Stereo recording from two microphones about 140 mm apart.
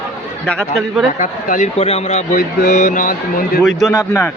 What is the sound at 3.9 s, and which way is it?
Speech, 20° left (ahead or behind).